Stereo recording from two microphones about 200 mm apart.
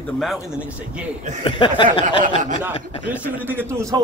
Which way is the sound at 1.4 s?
25° left (ahead or behind).